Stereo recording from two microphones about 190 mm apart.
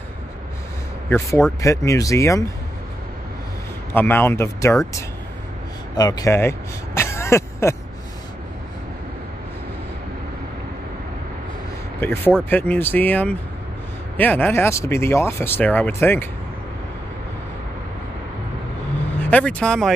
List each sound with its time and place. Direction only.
1.1 s speech: 15° left (ahead or behind)
3.9 s speech: 10° left (ahead or behind)
5.9 s speech: 20° left (ahead or behind)
12.0 s speech: 10° left (ahead or behind)
19.1 s speech: 5° left (ahead or behind)